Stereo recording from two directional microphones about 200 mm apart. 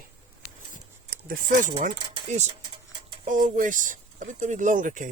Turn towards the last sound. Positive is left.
turn(degrees=-40)  # may be behind; listen again after turning